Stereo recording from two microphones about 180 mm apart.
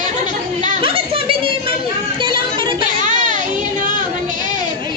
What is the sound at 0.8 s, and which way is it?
Music, 30° right (ahead or behind).